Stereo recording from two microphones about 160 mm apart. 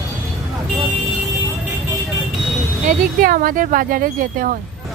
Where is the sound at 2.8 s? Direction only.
60° right (ahead or behind).